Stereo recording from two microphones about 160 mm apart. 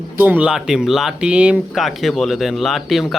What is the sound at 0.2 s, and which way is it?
Speech, 10° right (ahead or behind).